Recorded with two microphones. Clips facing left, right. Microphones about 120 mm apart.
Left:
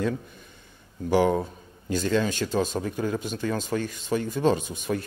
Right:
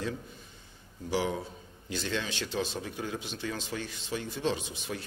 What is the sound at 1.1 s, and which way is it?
Speech, 55° left (ahead or behind).